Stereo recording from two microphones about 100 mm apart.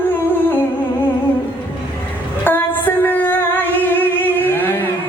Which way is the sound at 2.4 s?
20° left (ahead or behind).